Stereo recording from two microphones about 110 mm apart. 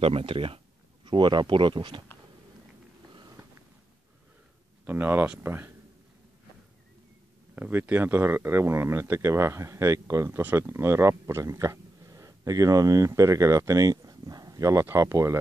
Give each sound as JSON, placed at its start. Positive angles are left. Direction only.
{"t": 0.0, "sound": "speech", "side_deg": -60}
{"t": 3.1, "sound": "a sound", "side_deg": -45}
{"t": 4.8, "sound": "speech", "side_deg": -20}
{"t": 7.5, "sound": "speech", "side_deg": -15}